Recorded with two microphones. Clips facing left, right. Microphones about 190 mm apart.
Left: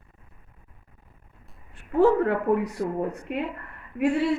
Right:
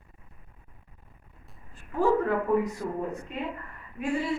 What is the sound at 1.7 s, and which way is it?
Speech, 70° left (ahead or behind).